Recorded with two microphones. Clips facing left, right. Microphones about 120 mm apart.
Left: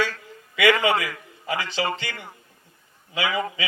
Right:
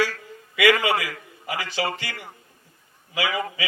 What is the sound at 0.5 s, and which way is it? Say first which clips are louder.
A man's voice: even; 25° left (ahead or behind).